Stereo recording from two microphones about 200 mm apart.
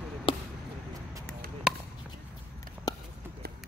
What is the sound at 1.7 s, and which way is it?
Chop, 5° right (ahead or behind).